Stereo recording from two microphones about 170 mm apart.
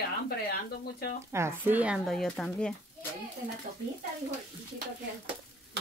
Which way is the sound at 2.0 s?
5° left (ahead or behind).